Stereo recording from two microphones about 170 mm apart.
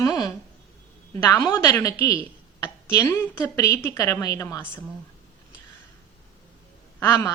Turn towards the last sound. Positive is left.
turn(degrees=15)  # may be behind; listen again after turning